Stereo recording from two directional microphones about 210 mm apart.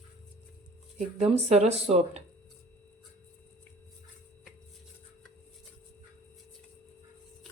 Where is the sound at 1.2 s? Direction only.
30° right (ahead or behind).